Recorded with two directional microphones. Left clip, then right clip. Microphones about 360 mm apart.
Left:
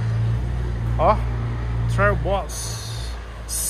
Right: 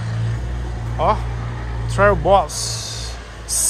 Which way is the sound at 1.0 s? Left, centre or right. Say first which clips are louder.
Even; centre.